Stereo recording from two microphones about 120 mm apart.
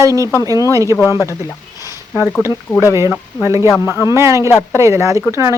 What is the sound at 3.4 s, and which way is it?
Speech, 25° right (ahead or behind).